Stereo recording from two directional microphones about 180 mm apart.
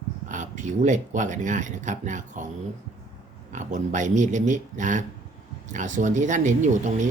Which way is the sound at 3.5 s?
45° right (ahead or behind).